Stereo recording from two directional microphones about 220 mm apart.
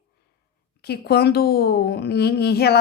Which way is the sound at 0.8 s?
45° left (ahead or behind).